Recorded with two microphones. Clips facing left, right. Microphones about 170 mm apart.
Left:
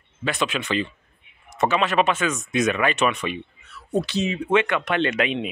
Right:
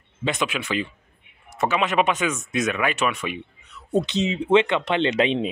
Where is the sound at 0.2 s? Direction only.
20° right (ahead or behind).